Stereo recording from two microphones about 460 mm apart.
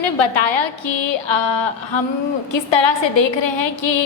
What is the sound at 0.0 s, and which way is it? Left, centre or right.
A woman's voice, left.